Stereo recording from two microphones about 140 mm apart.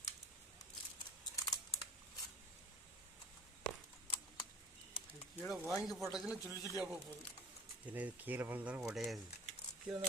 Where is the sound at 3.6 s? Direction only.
10° left (ahead or behind).